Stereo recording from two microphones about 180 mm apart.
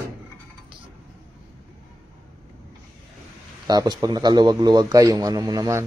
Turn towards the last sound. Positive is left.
turn(degrees=-20)  # may be behind; listen again after turning